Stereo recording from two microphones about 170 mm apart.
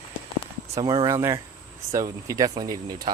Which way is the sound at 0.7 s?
25° right (ahead or behind).